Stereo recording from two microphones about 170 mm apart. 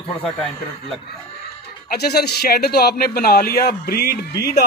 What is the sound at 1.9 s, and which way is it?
Speech, 70° left (ahead or behind).